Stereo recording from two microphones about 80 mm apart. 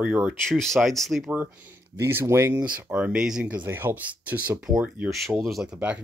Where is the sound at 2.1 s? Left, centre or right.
Right.